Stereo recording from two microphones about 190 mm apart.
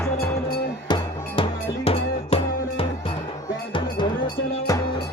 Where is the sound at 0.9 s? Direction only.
25° left (ahead or behind).